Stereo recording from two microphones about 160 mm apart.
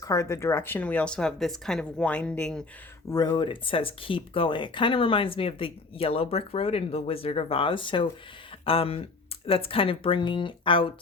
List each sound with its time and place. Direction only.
0.0 s speech: 20° left (ahead or behind)
3.1 s speech: 25° left (ahead or behind)